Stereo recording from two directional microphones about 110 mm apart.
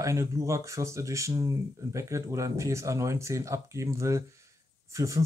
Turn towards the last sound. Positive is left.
turn(degrees=-30)  # may be behind; listen again after turning